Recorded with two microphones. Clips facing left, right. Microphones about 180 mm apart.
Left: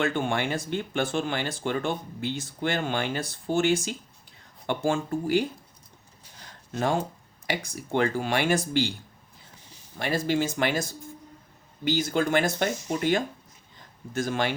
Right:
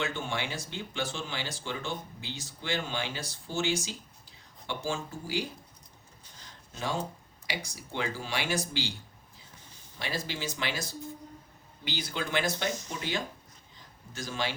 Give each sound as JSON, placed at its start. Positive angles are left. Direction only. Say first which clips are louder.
{"t": 0.0, "sound": "speech", "louder": "left 7 dB", "side_deg": 55}
{"t": 6.7, "sound": "speech", "louder": "left 7 dB", "side_deg": 55}
{"t": 10.0, "sound": "speech", "louder": "left 10 dB", "side_deg": 50}